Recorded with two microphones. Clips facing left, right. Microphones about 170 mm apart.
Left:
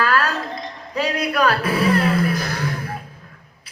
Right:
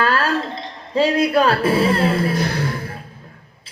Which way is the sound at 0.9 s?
25° right (ahead or behind).